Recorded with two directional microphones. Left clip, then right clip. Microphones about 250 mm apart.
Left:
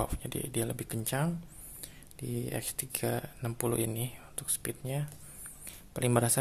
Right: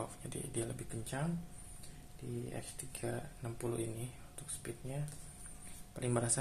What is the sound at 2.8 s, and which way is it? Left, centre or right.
Speech, left.